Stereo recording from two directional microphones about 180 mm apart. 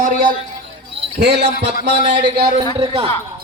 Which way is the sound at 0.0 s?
45° right (ahead or behind).